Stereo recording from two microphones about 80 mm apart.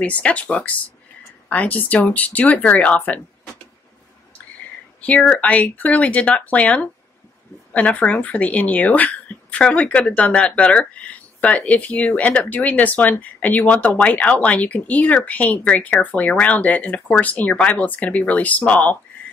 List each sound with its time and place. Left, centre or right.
0.0 s speech: centre
5.0 s speech: centre